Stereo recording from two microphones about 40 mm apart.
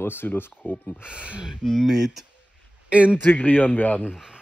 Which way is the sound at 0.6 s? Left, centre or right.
Left.